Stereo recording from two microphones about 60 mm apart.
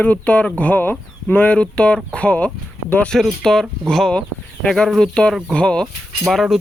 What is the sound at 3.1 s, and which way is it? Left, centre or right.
Speech, centre.